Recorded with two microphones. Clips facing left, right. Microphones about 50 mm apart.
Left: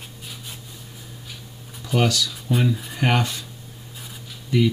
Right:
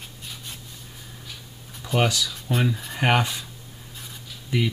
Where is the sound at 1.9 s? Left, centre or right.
Centre.